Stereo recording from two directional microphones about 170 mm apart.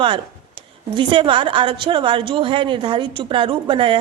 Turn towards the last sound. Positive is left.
turn(degrees=-30)  # may be behind; listen again after turning